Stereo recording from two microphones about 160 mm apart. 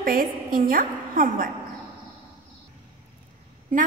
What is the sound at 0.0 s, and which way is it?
A woman's voice, 60° right (ahead or behind).